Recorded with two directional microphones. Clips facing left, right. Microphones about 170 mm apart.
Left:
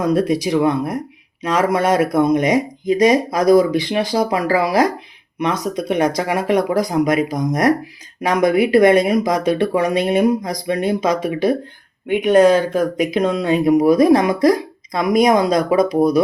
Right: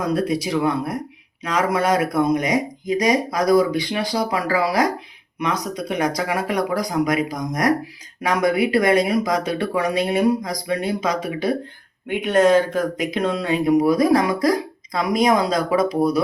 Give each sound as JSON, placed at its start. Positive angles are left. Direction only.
{"t": 0.1, "sound": "speech", "side_deg": 20}